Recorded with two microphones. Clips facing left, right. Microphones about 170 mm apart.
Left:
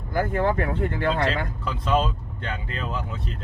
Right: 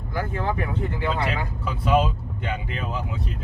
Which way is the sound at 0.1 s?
55° left (ahead or behind).